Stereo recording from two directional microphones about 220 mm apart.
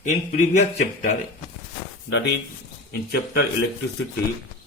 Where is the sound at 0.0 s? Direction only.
35° left (ahead or behind).